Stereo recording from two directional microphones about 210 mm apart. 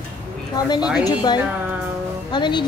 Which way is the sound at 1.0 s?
20° left (ahead or behind).